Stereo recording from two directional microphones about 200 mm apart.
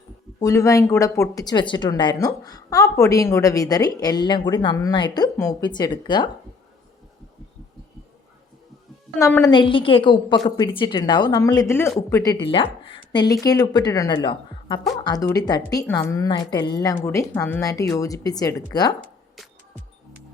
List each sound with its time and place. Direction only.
0.3 s a woman's voice: 15° left (ahead or behind)
9.1 s a woman's voice: 15° left (ahead or behind)
19.4 s music: centre (ahead or behind)